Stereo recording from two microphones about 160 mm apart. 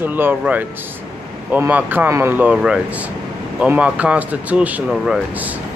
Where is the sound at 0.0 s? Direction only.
10° right (ahead or behind).